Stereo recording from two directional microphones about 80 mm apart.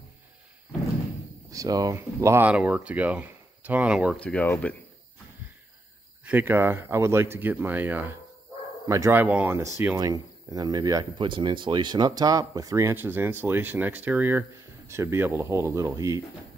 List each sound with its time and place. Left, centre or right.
1.5 s speech: right
2.0 s speech: right
2.4 s speech: centre
4.2 s speech: centre
6.2 s speech: right
8.8 s speech: right
9.1 s speech: right
9.5 s speech: right
9.9 s speech: right
11.1 s speech: right
12.8 s speech: right
14.9 s speech: right